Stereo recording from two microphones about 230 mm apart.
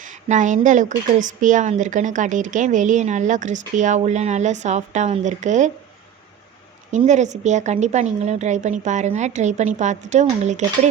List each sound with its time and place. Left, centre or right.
0.0 s a woman's voice: right
6.9 s a woman's voice: right